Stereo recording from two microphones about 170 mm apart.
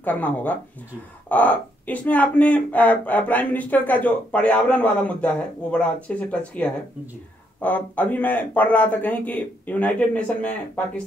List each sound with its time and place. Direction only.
0.0 s a woman's voice: 10° left (ahead or behind)